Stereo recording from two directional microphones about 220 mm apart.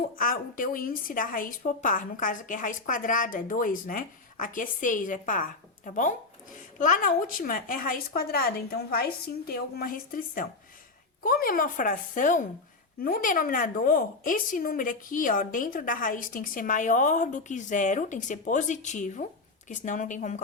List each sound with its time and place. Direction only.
0.2 s a woman's voice: 40° left (ahead or behind)